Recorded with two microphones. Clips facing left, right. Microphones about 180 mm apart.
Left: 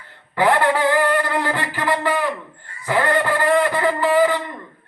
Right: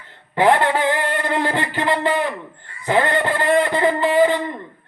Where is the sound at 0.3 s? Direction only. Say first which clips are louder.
Right 1 dB; 25° right (ahead or behind).